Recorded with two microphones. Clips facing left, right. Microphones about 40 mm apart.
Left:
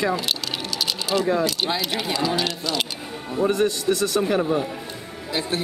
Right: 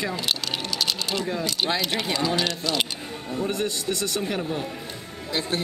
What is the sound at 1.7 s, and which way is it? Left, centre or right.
Speech, centre.